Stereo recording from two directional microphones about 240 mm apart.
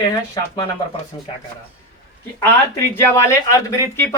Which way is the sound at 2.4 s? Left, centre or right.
Centre.